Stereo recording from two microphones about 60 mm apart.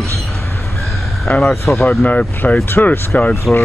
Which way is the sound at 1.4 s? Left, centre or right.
Centre.